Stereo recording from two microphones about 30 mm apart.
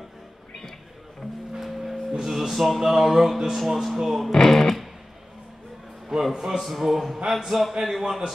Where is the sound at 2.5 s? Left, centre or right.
Centre.